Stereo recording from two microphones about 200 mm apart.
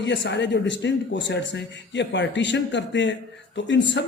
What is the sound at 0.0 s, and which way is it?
Speech, 60° left (ahead or behind).